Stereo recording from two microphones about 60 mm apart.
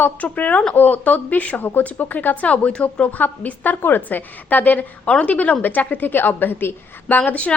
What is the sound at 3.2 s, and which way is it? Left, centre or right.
A woman's voice, left.